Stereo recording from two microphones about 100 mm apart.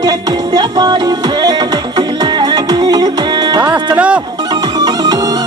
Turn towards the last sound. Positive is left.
turn(degrees=-40)  # may be behind; listen again after turning